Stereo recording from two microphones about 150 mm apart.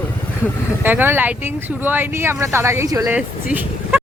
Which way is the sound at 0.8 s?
15° right (ahead or behind).